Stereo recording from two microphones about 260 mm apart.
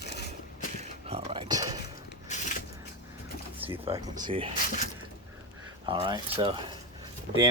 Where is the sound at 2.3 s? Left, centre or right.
Left.